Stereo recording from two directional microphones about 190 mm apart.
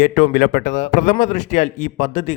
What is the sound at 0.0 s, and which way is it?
A man's voice, 45° left (ahead or behind).